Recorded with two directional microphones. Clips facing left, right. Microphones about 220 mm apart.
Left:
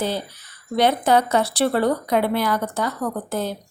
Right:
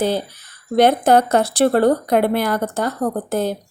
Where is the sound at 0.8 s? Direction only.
50° right (ahead or behind).